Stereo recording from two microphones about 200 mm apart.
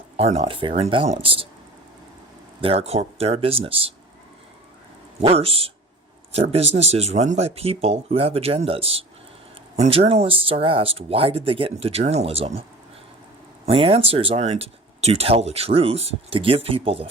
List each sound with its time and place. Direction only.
0.2 s speech: 30° right (ahead or behind)
2.6 s speech: 30° right (ahead or behind)
5.2 s speech: 30° right (ahead or behind)
13.7 s speech: 30° right (ahead or behind)